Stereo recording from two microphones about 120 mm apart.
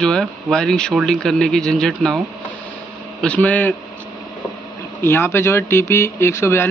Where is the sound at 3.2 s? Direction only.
10° left (ahead or behind).